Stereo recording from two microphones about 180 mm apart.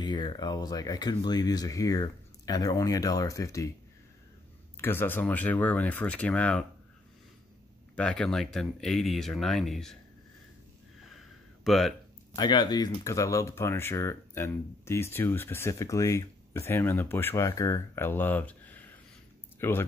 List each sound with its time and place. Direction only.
0.0 s speech: 25° left (ahead or behind)
4.7 s speech: 10° left (ahead or behind)
7.9 s speech: 5° left (ahead or behind)
11.1 s a sound: centre (ahead or behind)
12.4 s speech: 25° left (ahead or behind)